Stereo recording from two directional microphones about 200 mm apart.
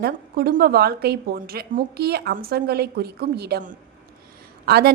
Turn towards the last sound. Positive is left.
turn(degrees=-50)  # may be behind; listen again after turning